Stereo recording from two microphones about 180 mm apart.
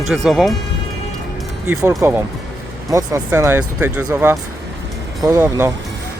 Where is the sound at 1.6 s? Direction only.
15° right (ahead or behind).